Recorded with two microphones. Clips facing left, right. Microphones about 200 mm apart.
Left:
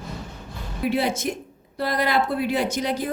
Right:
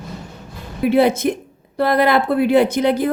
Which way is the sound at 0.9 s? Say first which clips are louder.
Right 10 dB; 60° right (ahead or behind).